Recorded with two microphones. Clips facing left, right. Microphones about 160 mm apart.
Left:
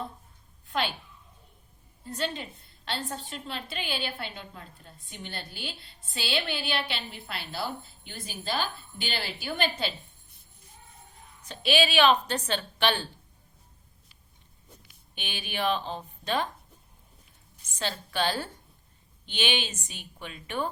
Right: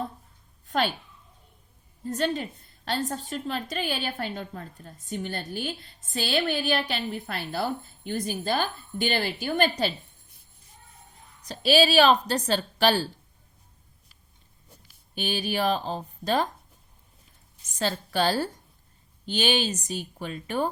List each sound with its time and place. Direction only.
0.7 s a woman's voice: 45° right (ahead or behind)
2.0 s a woman's voice: 45° right (ahead or behind)
11.4 s a woman's voice: 40° right (ahead or behind)
15.1 s a woman's voice: 40° right (ahead or behind)
17.7 s a woman's voice: 40° right (ahead or behind)